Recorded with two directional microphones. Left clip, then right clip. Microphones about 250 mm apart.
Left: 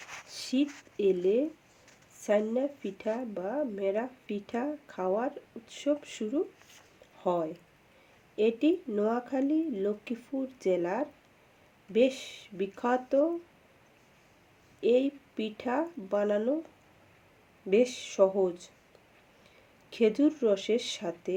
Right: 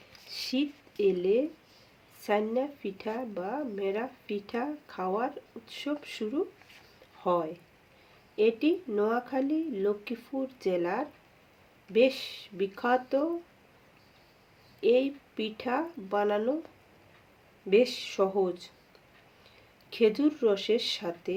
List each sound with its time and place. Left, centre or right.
0.3 s speech: centre
7.2 s speech: left
14.8 s speech: left
17.7 s speech: left
19.9 s speech: left